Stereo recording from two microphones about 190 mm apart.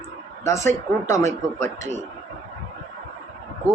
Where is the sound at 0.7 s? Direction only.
40° right (ahead or behind).